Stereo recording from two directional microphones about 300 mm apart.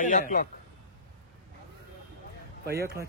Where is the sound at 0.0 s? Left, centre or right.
Left.